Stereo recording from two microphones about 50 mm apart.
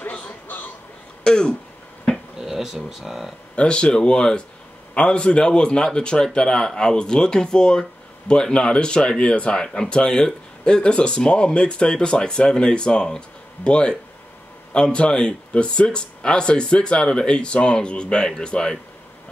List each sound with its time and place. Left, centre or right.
1.2 s speech: centre
2.4 s speech: centre
3.5 s speech: left